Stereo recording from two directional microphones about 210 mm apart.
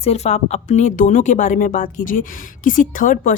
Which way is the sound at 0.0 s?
30° left (ahead or behind).